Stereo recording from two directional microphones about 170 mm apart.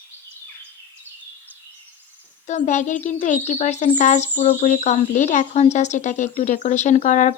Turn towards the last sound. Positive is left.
turn(degrees=45)  # may be behind; listen again after turning